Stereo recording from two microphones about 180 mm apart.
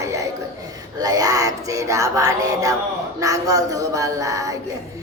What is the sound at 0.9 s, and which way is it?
Music, 20° right (ahead or behind).